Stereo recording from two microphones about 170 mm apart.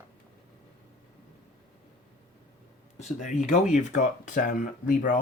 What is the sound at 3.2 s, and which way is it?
Speech, 45° left (ahead or behind).